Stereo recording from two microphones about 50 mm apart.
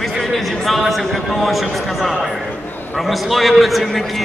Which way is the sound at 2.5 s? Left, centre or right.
Left.